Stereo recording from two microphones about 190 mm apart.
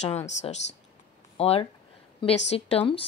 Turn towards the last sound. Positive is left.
turn(degrees=30)  # may be behind; listen again after turning